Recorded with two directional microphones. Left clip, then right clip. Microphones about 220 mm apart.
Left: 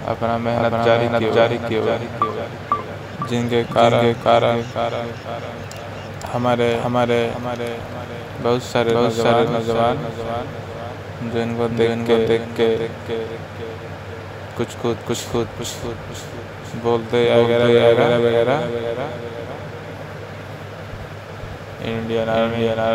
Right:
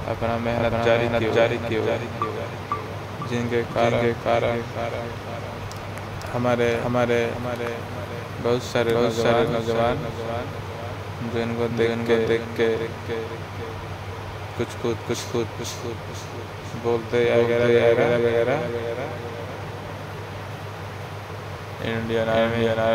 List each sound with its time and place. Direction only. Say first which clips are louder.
0.2 s speech: left 4 dB; 10° left (ahead or behind)
3.3 s speech: left 5 dB; 20° left (ahead or behind)
6.4 s speech: left 3 dB; 10° left (ahead or behind)
8.5 s speech: left 4 dB; 10° left (ahead or behind)
11.3 s speech: left 4 dB; 10° left (ahead or behind)
14.6 s speech: left 4 dB; 15° left (ahead or behind)
16.8 s speech: left 4 dB; 15° left (ahead or behind)
21.8 s speech: left 2 dB; 5° left (ahead or behind)